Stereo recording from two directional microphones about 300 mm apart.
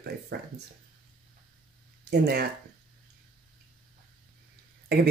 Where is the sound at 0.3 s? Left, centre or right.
Right.